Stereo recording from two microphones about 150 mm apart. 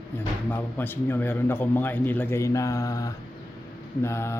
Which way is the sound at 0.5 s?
15° left (ahead or behind).